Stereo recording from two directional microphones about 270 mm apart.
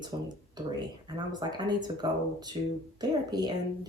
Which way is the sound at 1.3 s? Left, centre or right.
Centre.